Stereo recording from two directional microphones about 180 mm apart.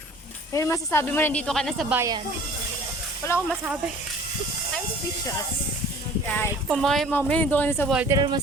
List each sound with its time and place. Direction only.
0.5 s a woman's voice: 15° left (ahead or behind)
1.9 s speech: 15° right (ahead or behind)
3.2 s a woman's voice: 15° left (ahead or behind)
6.7 s a woman's voice: centre (ahead or behind)
8.0 s speech: 20° right (ahead or behind)